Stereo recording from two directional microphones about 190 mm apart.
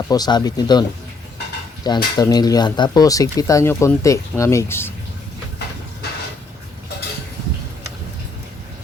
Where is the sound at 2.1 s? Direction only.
20° left (ahead or behind).